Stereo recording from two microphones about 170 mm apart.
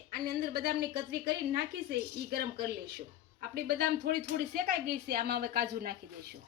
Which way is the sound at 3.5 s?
65° right (ahead or behind).